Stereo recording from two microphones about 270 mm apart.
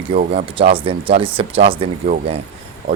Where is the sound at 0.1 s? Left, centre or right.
Right.